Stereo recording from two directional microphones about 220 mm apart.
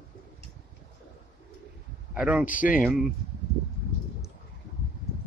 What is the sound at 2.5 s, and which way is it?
Speech, 35° left (ahead or behind).